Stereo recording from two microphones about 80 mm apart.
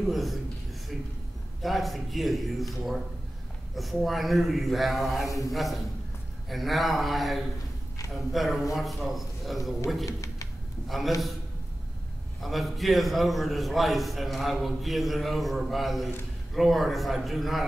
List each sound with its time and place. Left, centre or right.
0.0 s a man's voice: centre
1.6 s a man's voice: centre
10.0 s a sound: left
12.4 s a man's voice: centre